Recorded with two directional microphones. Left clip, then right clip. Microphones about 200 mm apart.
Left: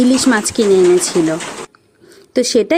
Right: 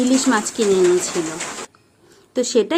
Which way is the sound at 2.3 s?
35° left (ahead or behind).